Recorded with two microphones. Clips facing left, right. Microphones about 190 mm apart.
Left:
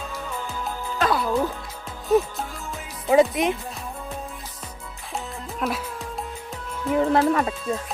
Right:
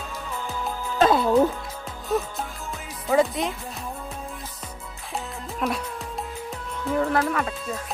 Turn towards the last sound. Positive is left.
turn(degrees=30)  # may be behind; listen again after turning